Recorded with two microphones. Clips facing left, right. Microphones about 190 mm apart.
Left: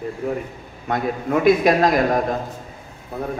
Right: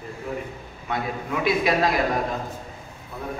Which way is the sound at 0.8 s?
45° left (ahead or behind).